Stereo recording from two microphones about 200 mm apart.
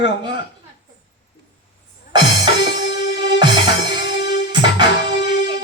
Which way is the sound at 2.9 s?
60° left (ahead or behind).